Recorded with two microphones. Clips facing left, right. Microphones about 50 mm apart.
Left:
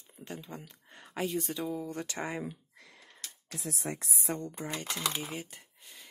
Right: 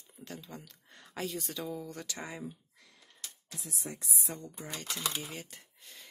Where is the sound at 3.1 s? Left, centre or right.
Left.